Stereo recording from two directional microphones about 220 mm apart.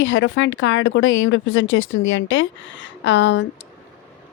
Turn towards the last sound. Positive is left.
turn(degrees=55)  # may be behind; listen again after turning